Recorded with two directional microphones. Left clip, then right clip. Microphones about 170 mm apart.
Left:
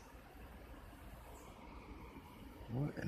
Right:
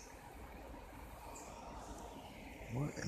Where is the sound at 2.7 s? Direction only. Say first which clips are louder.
Even; 25° left (ahead or behind).